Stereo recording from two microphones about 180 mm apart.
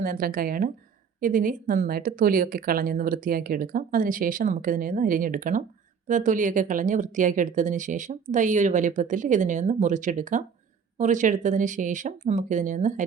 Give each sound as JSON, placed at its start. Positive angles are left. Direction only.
{"t": 0.0, "sound": "speech", "side_deg": -55}